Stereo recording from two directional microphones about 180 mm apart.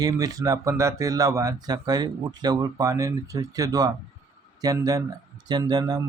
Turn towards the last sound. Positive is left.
turn(degrees=-20)  # may be behind; listen again after turning